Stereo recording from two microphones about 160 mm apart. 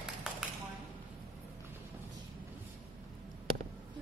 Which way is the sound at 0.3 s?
5° right (ahead or behind).